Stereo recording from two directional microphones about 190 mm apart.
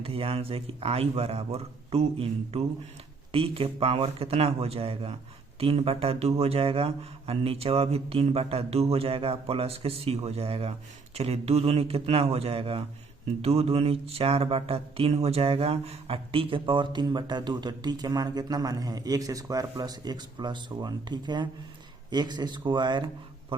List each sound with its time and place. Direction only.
0.0 s speech: 30° right (ahead or behind)
13.4 s a sound: 30° right (ahead or behind)
23.5 s speech: 30° right (ahead or behind)